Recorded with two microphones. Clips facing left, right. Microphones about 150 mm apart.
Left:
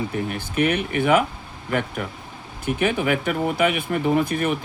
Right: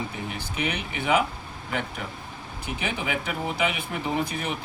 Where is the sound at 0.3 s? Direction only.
55° left (ahead or behind).